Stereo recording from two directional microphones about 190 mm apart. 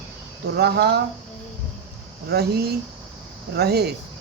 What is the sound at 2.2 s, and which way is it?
A woman's voice, 55° right (ahead or behind).